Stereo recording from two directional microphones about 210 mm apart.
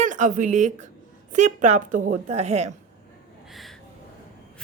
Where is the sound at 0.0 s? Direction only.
35° right (ahead or behind).